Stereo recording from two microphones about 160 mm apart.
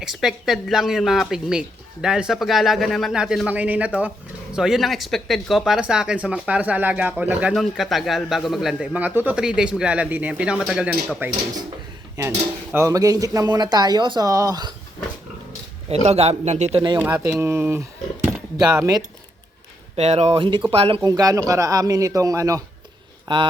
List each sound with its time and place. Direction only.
0.0 s speech: centre (ahead or behind)
12.2 s speech: 20° right (ahead or behind)
16.0 s speech: 40° right (ahead or behind)
17.0 s speech: 10° right (ahead or behind)
20.0 s speech: 45° right (ahead or behind)
21.0 s speech: 20° right (ahead or behind)